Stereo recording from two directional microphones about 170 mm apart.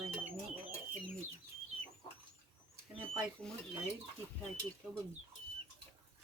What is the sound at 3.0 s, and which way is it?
Speech, 5° left (ahead or behind).